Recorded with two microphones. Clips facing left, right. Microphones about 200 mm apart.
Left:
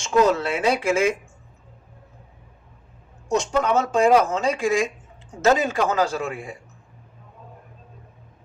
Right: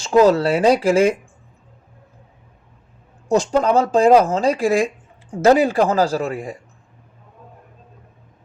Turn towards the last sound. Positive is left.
turn(degrees=-35)  # may be behind; listen again after turning